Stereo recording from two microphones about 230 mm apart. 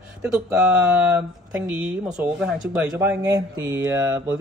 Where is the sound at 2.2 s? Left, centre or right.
Centre.